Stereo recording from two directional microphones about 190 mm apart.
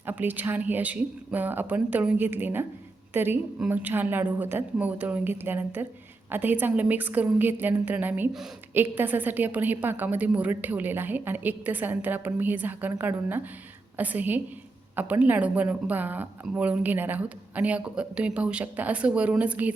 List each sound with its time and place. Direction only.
0.0 s speech: 10° right (ahead or behind)